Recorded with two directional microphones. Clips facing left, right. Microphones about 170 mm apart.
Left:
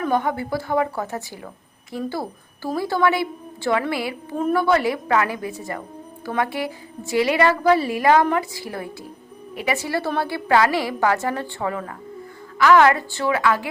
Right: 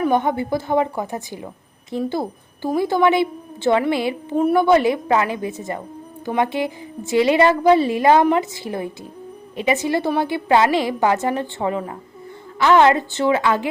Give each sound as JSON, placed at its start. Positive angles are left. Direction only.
{"t": 0.0, "sound": "a woman's voice", "side_deg": -20}